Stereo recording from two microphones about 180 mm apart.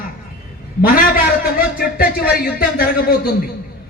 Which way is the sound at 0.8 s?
55° left (ahead or behind).